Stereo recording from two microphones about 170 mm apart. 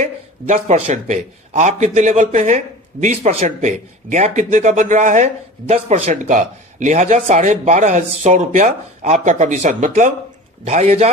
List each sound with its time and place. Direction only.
0.0 s a man's voice: 45° right (ahead or behind)